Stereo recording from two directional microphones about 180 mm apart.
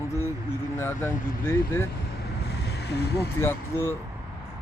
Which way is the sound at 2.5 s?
65° left (ahead or behind).